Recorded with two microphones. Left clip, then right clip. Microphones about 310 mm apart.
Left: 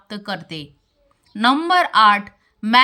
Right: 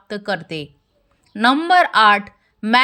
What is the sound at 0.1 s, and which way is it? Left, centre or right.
A woman's voice, centre.